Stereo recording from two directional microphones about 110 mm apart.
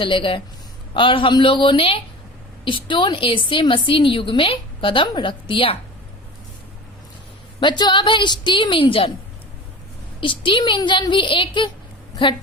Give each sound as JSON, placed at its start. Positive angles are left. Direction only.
{"t": 0.0, "sound": "a woman's voice", "side_deg": 50}
{"t": 7.6, "sound": "a woman's voice", "side_deg": 45}
{"t": 10.2, "sound": "a woman's voice", "side_deg": 50}